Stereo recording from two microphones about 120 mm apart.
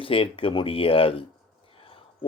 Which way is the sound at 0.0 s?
50° left (ahead or behind).